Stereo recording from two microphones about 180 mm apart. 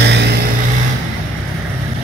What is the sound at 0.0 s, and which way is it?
Vehicle, 70° right (ahead or behind).